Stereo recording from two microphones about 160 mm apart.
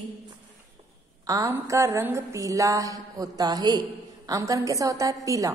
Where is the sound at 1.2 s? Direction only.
20° right (ahead or behind).